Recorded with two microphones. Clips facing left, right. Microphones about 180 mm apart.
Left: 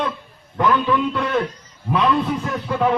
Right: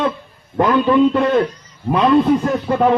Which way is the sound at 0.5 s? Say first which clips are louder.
Right 5 dB; 45° right (ahead or behind).